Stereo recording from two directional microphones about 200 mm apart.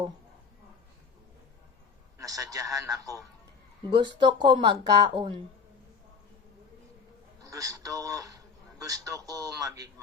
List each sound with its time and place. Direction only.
2.1 s a man's voice: 15° right (ahead or behind)
7.4 s a man's voice: 15° right (ahead or behind)